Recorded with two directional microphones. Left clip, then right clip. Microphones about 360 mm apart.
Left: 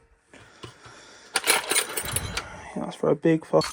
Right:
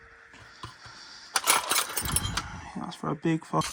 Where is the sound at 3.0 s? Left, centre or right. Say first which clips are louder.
Left 9 dB; centre.